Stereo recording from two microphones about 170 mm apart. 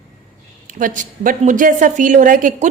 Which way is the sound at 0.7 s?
50° right (ahead or behind).